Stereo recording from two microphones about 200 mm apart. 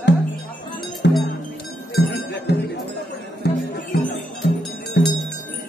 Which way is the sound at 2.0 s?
55° left (ahead or behind).